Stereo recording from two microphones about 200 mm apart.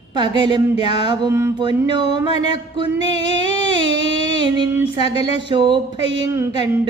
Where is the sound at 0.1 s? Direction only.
20° right (ahead or behind).